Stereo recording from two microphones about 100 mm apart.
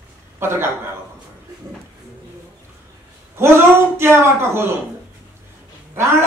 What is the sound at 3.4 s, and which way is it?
A man's voice, 25° right (ahead or behind).